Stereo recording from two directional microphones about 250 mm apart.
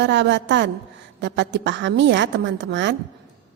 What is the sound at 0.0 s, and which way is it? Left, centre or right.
A woman's voice, right.